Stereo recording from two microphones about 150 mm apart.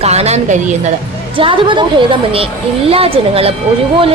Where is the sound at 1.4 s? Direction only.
35° right (ahead or behind).